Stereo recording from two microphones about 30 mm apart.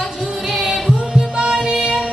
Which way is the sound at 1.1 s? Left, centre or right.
Right.